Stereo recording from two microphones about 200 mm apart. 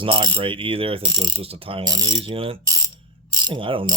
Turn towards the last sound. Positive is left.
turn(degrees=-25)  # may be behind; listen again after turning